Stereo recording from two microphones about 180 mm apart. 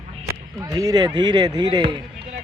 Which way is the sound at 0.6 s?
20° right (ahead or behind).